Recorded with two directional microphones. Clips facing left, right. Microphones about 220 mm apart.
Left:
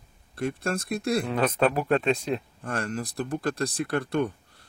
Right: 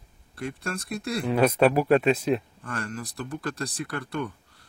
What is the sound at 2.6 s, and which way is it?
Speech, 45° left (ahead or behind).